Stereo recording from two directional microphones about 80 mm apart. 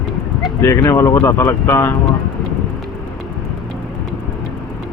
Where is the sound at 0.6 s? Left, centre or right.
Left.